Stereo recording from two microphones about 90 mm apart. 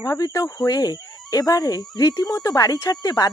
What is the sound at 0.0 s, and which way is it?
Speech, 40° left (ahead or behind).